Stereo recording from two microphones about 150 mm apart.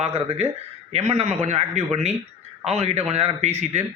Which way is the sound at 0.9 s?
45° right (ahead or behind).